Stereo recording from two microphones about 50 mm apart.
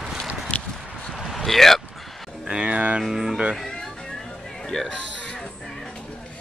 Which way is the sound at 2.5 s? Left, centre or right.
Centre.